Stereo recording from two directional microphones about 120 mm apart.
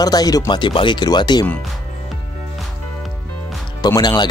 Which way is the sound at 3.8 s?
35° left (ahead or behind).